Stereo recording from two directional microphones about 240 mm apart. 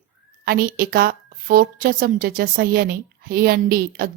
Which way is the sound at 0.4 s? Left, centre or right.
Right.